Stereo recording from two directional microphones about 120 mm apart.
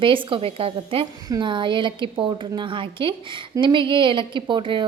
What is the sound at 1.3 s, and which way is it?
Speech, 40° right (ahead or behind).